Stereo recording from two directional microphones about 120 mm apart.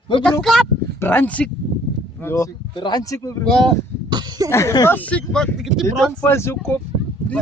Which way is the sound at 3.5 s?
5° left (ahead or behind).